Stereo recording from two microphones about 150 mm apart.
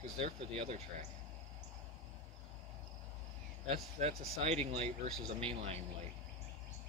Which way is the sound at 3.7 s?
45° right (ahead or behind).